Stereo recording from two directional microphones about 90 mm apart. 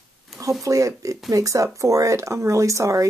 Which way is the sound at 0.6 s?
40° right (ahead or behind).